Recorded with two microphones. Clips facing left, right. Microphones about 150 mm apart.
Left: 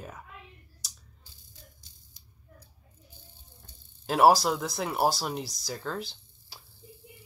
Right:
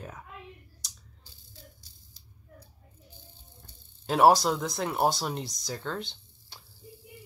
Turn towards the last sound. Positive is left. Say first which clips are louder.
# even
turn(degrees=5)  # may be behind; listen again after turning